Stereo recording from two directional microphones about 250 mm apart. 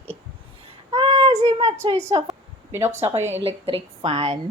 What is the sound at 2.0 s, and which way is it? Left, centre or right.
Speech, centre.